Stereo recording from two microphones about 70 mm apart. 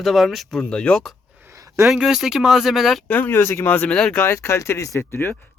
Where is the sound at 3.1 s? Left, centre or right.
Left.